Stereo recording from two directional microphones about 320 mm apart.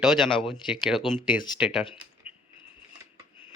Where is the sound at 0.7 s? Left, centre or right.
Centre.